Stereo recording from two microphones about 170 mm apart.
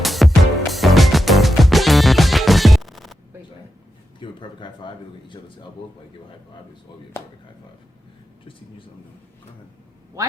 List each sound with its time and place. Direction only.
0.0 s music: centre (ahead or behind)
4.2 s a man's voice: 30° left (ahead or behind)
10.2 s speech: 20° right (ahead or behind)